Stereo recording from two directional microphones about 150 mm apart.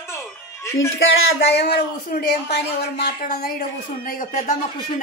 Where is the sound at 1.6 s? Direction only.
85° left.